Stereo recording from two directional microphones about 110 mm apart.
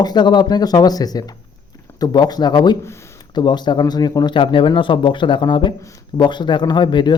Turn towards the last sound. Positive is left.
turn(degrees=45)  # may be behind; listen again after turning